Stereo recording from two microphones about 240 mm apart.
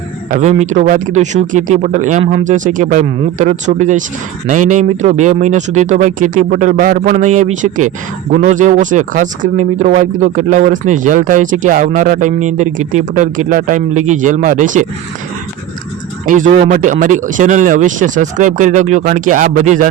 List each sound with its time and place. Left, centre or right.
0.3 s speech: right
16.2 s speech: right